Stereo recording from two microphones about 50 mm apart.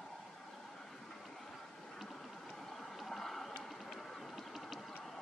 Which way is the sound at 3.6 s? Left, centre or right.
Centre.